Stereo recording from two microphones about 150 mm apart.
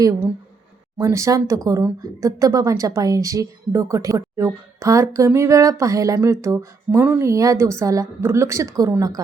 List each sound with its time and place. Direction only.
0.0 s speech: 20° right (ahead or behind)